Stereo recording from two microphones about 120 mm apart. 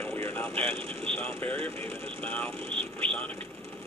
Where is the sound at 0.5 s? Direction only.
50° right (ahead or behind).